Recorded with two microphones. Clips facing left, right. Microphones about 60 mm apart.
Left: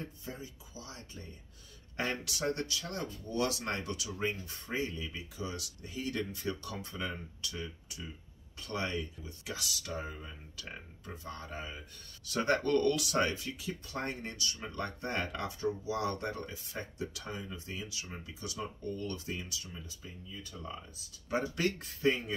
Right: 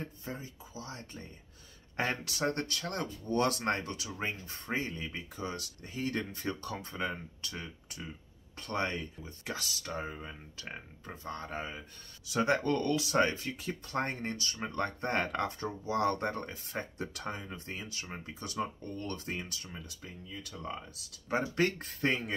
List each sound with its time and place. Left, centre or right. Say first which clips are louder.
0.0 s speech: right 2 dB; right
2.2 s speech: right 2 dB; right
12.3 s speech: right 1 dB; centre; by 21.0 s right
21.3 s speech: right 2 dB; right